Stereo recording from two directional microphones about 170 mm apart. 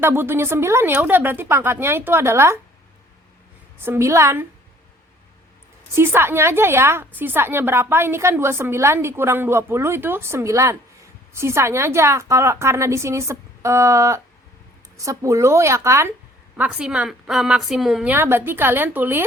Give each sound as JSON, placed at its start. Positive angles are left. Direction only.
{"t": 0.0, "sound": "a woman's voice", "side_deg": -15}
{"t": 3.8, "sound": "a woman's voice", "side_deg": -15}
{"t": 5.9, "sound": "a woman's voice", "side_deg": -15}
{"t": 16.6, "sound": "a woman's voice", "side_deg": -5}